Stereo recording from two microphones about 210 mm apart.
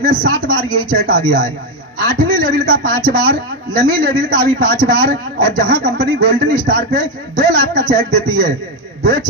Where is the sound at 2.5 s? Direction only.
40° right (ahead or behind).